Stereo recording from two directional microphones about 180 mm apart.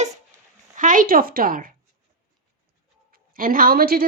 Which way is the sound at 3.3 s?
50° right (ahead or behind).